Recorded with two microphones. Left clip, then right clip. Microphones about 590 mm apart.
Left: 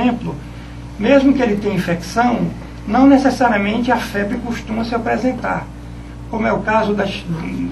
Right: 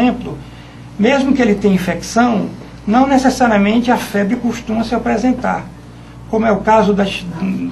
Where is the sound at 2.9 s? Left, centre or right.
Right.